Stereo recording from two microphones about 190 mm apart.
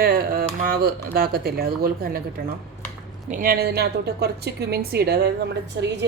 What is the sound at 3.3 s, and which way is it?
Speech, 50° right (ahead or behind).